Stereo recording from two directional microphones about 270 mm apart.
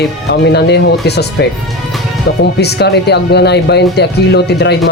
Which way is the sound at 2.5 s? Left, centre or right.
Left.